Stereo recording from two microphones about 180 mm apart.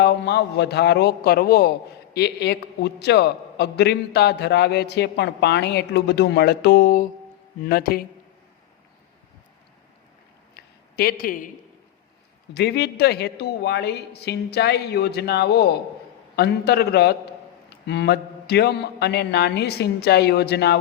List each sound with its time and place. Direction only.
0.0 s a man's voice: 65° left (ahead or behind)
10.5 s a sound: 60° left (ahead or behind)
12.5 s a man's voice: 65° left (ahead or behind)